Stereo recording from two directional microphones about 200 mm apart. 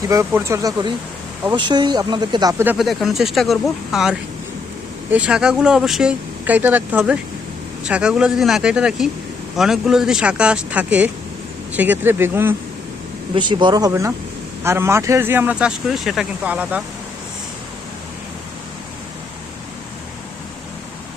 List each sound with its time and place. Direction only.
0.1 s speech: 15° right (ahead or behind)
2.7 s speech: centre (ahead or behind)
13.3 s speech: 25° right (ahead or behind); by 16.8 s 5° right (ahead or behind)